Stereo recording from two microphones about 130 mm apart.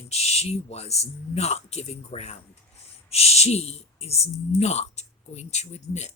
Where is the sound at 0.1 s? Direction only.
55° left (ahead or behind).